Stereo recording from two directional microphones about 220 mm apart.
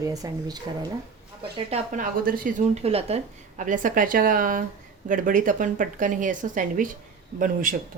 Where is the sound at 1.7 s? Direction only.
35° right (ahead or behind).